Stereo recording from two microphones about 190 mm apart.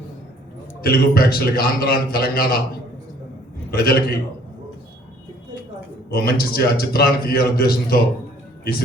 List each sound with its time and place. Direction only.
0.8 s a man's voice: 55° left (ahead or behind)
3.7 s a man's voice: 55° left (ahead or behind)
6.1 s a man's voice: 50° left (ahead or behind)